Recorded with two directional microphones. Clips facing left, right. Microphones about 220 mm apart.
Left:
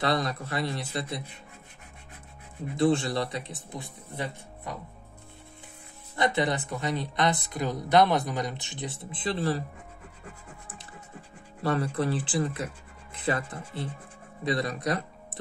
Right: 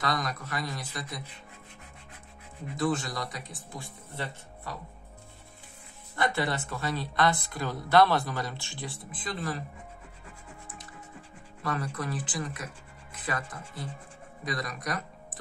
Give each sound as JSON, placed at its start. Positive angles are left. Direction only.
{"t": 0.0, "sound": "speech", "side_deg": 30}
{"t": 2.7, "sound": "speech", "side_deg": 25}
{"t": 6.1, "sound": "speech", "side_deg": 20}
{"t": 11.6, "sound": "speech", "side_deg": 30}